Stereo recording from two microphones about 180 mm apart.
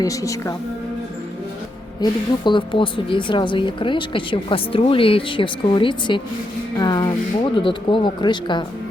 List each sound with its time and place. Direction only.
0.0 s a woman's voice: 20° left (ahead or behind)
2.0 s a woman's voice: 25° left (ahead or behind)